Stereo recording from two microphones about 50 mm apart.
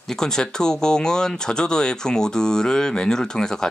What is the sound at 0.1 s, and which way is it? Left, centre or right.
Speech, centre.